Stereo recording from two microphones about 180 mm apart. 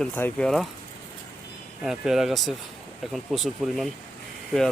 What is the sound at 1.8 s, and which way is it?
Speech, centre (ahead or behind).